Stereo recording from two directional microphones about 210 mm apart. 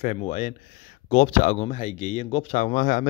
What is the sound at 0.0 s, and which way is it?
Speech, 30° left (ahead or behind).